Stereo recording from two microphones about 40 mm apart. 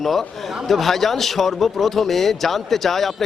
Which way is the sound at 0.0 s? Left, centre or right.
Centre.